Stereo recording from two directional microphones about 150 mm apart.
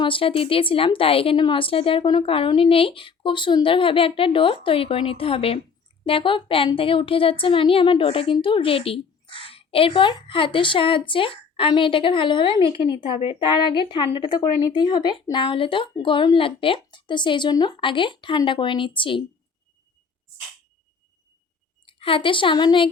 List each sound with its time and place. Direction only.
0.0 s a woman's voice: 35° left (ahead or behind)
21.8 s a woman's voice: 35° left (ahead or behind)